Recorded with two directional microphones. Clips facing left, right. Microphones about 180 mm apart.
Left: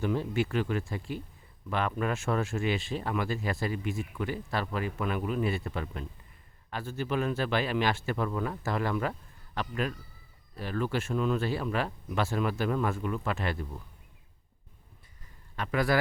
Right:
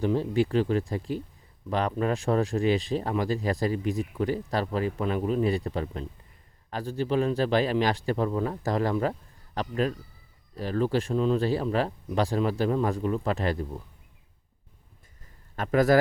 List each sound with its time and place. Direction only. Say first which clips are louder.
0.0 s speech: right 5 dB; 35° right (ahead or behind)
15.5 s speech: right 7 dB; 40° right (ahead or behind)